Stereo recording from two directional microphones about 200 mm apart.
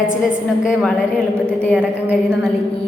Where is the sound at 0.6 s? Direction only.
5° right (ahead or behind).